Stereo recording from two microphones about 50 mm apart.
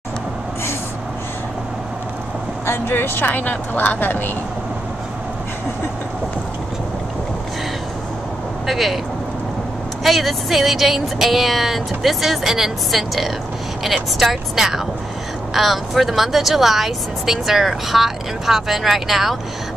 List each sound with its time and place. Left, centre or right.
2.6 s speech: left
8.6 s speech: centre
10.0 s speech: centre